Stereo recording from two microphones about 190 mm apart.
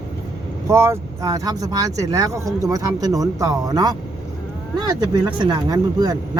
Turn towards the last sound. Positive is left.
turn(degrees=-20)  # may be behind; listen again after turning